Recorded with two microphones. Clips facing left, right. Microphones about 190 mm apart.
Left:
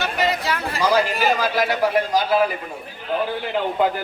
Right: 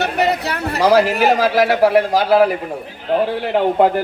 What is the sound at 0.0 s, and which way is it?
A man's voice, 65° right (ahead or behind).